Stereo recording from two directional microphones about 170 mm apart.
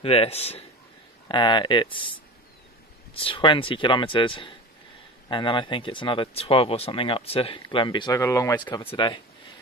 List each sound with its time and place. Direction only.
0.0 s speech: 35° left (ahead or behind)
1.3 s speech: 25° left (ahead or behind)
3.2 s speech: 30° left (ahead or behind)
8.2 s speech: 15° left (ahead or behind)